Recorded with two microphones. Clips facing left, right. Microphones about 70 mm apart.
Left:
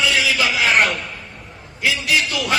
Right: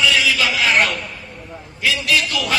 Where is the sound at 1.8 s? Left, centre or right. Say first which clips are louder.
Even; centre.